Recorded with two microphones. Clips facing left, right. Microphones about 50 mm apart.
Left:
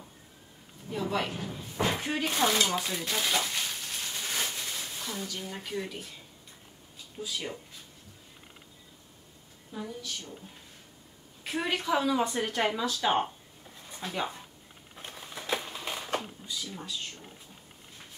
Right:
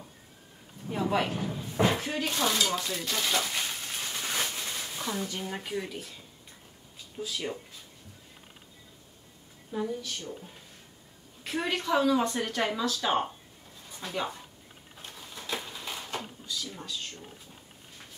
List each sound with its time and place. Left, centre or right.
1.0 s a sound: centre
2.0 s a woman's voice: centre
3.5 s a sound: centre
4.9 s speech: right
5.8 s speech: centre
7.2 s speech: centre
9.7 s a woman's voice: centre
11.4 s a woman's voice: centre
15.0 s a sound: left